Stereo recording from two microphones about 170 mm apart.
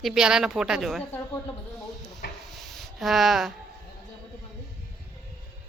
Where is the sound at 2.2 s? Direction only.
75° left (ahead or behind).